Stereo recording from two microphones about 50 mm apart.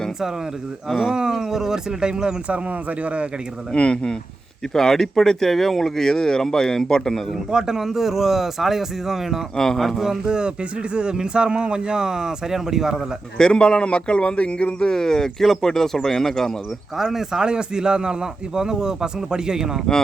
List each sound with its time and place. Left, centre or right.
0.9 s speech: centre
1.1 s speech: centre
2.5 s speech: right
3.7 s a man's voice: left
7.5 s speech: centre
9.6 s a man's voice: centre
9.8 s speech: centre
13.4 s a man's voice: centre
17.0 s speech: centre